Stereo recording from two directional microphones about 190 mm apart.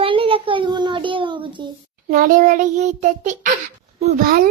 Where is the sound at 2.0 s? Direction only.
45° right (ahead or behind).